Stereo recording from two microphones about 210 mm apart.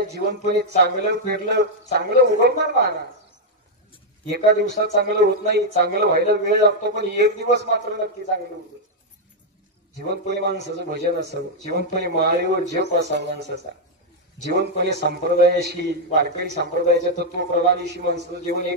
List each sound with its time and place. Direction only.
0.2 s a man's voice: 50° right (ahead or behind)
4.3 s a man's voice: 55° right (ahead or behind)
10.1 s a man's voice: 50° right (ahead or behind)
14.5 s a man's voice: 50° right (ahead or behind)